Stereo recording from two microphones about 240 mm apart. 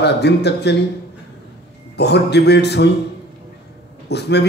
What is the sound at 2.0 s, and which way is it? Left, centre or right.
Speech, left.